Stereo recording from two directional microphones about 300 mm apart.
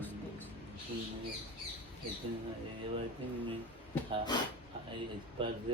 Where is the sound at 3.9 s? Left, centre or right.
Centre.